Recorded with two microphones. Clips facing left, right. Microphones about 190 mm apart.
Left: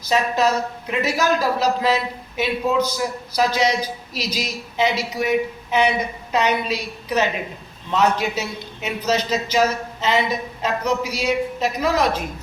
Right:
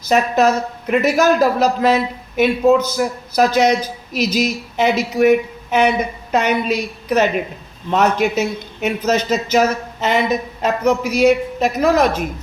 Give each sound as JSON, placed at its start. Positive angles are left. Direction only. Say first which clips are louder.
{"t": 0.1, "sound": "a man's voice", "louder": "right 4 dB", "side_deg": -50}